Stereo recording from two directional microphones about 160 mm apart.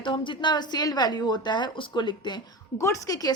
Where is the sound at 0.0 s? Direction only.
30° left (ahead or behind).